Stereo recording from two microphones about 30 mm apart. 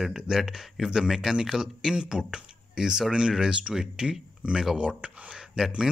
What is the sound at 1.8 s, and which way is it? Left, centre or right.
Speech, right.